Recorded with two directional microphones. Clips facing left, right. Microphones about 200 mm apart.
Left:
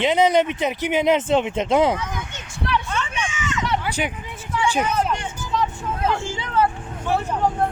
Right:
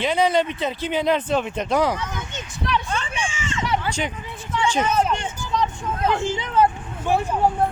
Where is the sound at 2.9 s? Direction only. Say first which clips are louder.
Even; 30° right (ahead or behind).